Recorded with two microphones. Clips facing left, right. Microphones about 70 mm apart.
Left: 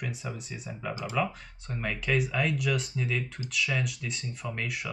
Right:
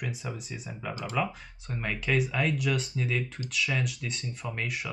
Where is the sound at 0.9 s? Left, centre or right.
Centre.